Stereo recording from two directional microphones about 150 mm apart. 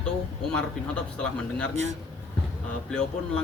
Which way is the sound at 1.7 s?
50° right (ahead or behind).